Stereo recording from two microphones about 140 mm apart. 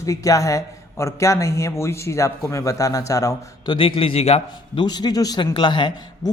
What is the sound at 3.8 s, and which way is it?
A man's voice, 40° left (ahead or behind).